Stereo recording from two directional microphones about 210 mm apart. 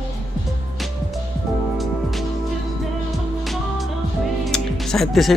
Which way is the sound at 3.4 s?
Centre (ahead or behind).